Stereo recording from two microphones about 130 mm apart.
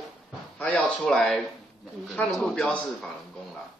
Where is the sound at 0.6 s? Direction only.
5° left (ahead or behind).